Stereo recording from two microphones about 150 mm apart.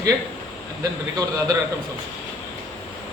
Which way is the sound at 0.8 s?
25° right (ahead or behind).